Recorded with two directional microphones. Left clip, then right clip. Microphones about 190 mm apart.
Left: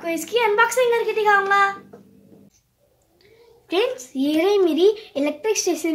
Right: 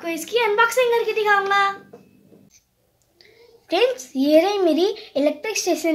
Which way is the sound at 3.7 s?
40° right (ahead or behind).